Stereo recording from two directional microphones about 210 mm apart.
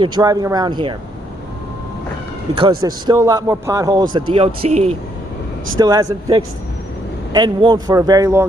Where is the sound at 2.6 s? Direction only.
20° right (ahead or behind).